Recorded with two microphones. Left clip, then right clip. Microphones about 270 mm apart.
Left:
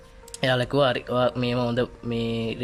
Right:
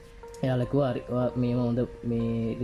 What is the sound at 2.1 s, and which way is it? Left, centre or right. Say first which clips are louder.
Speech: left 2 dB; left.